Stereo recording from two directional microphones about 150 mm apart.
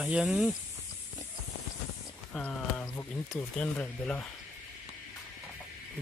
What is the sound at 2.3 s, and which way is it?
Speech, 5° left (ahead or behind).